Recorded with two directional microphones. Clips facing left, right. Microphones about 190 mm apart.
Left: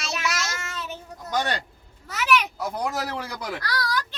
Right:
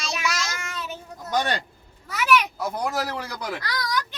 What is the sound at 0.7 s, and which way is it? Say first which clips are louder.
Child singing: right 1 dB; 10° right (ahead or behind).